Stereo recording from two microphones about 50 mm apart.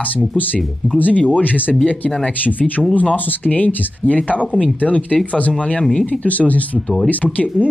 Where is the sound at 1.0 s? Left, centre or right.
Left.